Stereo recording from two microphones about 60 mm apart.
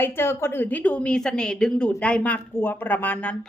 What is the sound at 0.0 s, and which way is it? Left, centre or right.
A woman's voice, left.